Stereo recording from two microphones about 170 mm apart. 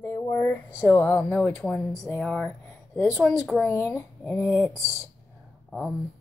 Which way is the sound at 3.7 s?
15° left (ahead or behind).